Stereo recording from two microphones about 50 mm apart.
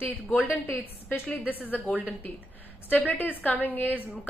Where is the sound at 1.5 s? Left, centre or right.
Left.